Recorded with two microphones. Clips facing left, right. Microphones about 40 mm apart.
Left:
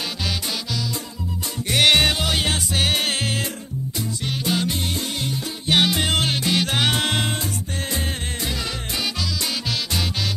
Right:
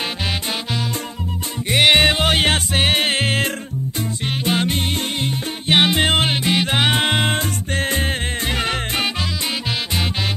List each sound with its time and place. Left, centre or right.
1.7 s music: right
2.2 s music: right
7.2 s music: right